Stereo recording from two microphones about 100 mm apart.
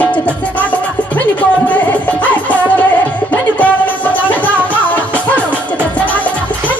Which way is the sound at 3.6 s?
15° left (ahead or behind).